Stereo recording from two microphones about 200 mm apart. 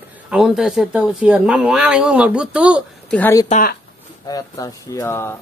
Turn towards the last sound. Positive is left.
turn(degrees=15)  # may be behind; listen again after turning